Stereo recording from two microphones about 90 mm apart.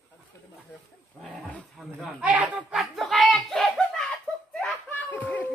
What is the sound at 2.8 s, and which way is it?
Speech, centre (ahead or behind).